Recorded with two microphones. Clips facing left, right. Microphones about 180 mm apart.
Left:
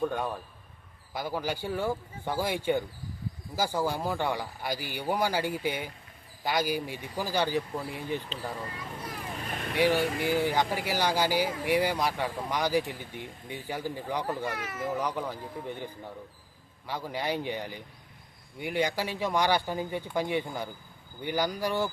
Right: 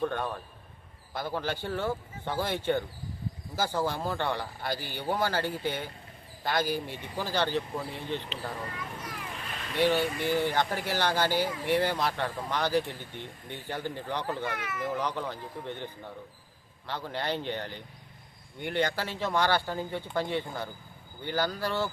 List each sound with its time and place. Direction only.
0.0 s speech: 10° left (ahead or behind)
9.4 s boat: 50° left (ahead or behind)
9.7 s speech: 10° left (ahead or behind)
14.4 s speech: 40° left (ahead or behind)
14.9 s speech: 10° left (ahead or behind)